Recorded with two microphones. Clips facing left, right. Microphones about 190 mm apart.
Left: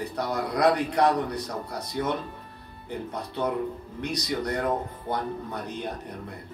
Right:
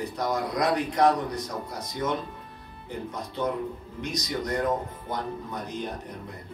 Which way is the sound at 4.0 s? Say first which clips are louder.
Left 2 dB; 65° left (ahead or behind).